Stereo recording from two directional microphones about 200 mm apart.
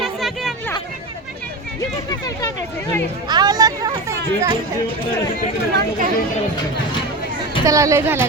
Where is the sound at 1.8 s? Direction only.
20° left (ahead or behind).